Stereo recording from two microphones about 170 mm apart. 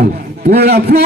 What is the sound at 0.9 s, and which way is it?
Speech, 65° right (ahead or behind).